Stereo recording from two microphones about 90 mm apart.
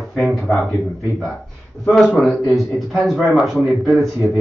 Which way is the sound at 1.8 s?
10° left (ahead or behind).